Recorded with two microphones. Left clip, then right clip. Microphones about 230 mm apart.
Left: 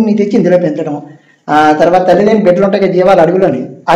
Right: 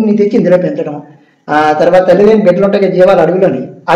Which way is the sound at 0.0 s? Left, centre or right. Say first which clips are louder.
Right 1 dB; left.